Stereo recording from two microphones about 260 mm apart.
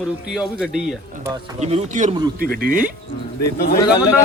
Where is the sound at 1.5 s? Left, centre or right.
Right.